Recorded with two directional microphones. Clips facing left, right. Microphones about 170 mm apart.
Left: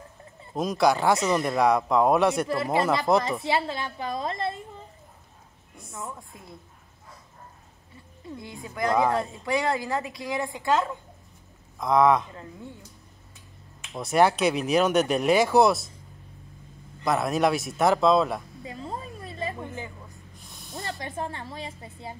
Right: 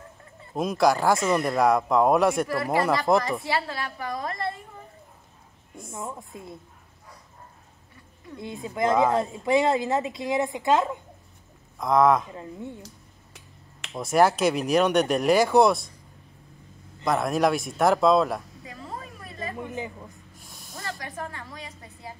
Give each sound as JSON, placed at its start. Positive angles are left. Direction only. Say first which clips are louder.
{"t": 0.6, "sound": "speech", "louder": "right 1 dB", "side_deg": 0}
{"t": 2.4, "sound": "speech", "louder": "even", "side_deg": 20}
{"t": 5.9, "sound": "a woman's voice", "louder": "right 2 dB", "side_deg": -20}
{"t": 8.4, "sound": "a woman's voice", "louder": "right 4 dB", "side_deg": -20}
{"t": 11.8, "sound": "speech", "louder": "even", "side_deg": 0}
{"t": 12.8, "sound": "a sound", "louder": "right 3 dB", "side_deg": -80}
{"t": 13.9, "sound": "speech", "louder": "right 1 dB", "side_deg": 0}
{"t": 17.0, "sound": "speech", "louder": "right 1 dB", "side_deg": 0}
{"t": 18.7, "sound": "a sound", "louder": "left 3 dB", "side_deg": 25}
{"t": 19.6, "sound": "speech", "louder": "right 3 dB", "side_deg": -15}
{"t": 20.4, "sound": "snort", "louder": "left 1 dB", "side_deg": 0}
{"t": 20.7, "sound": "speech", "louder": "left 2 dB", "side_deg": 25}